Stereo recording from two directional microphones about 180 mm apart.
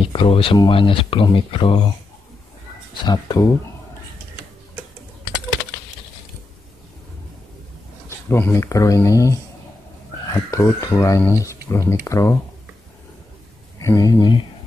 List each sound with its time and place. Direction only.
0.0 s speech: 30° left (ahead or behind)
3.0 s speech: 20° left (ahead or behind)
8.3 s speech: 15° left (ahead or behind)
10.3 s speech: 15° left (ahead or behind)
13.7 s speech: 20° left (ahead or behind)